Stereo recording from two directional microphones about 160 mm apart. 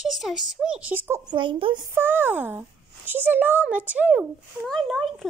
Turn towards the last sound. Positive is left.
turn(degrees=0)  # may be behind; listen again after turning